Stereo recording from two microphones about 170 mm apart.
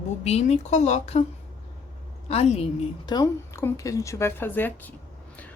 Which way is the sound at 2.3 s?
40° left (ahead or behind).